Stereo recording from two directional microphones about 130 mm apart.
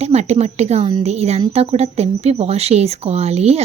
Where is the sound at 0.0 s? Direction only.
55° right (ahead or behind).